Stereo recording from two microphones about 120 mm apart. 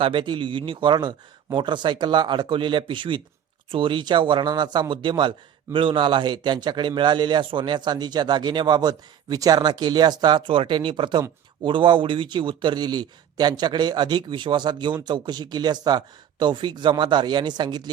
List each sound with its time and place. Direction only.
0.0 s a man's voice: 45° right (ahead or behind)